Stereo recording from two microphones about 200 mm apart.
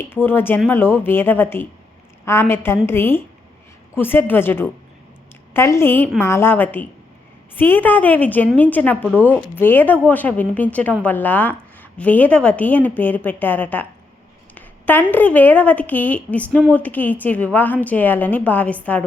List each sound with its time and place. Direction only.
0.0 s a woman's voice: 10° left (ahead or behind)
14.5 s a sound: 10° left (ahead or behind)
15.1 s a woman's voice: 10° left (ahead or behind)